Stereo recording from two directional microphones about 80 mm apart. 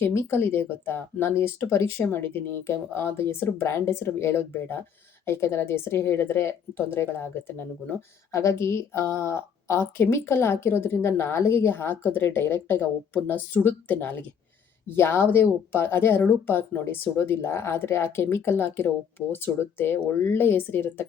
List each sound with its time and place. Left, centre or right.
0.0 s a woman's voice: left